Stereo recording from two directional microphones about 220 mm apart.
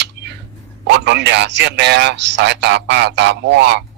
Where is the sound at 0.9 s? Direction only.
50° right (ahead or behind).